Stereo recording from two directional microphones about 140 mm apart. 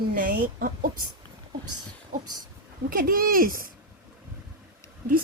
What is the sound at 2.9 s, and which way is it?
Speech, 90° right.